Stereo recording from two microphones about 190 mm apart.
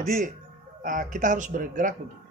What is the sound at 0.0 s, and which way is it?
Speech, 45° right (ahead or behind).